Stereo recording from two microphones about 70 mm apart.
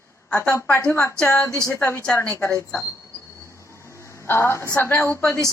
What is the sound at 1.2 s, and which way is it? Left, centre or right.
Speech, left.